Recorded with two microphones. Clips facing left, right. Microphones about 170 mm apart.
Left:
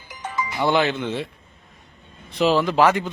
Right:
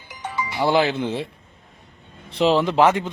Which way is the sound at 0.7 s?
30° right (ahead or behind).